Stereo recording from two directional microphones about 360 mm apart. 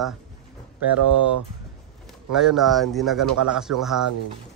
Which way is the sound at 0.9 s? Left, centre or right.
Right.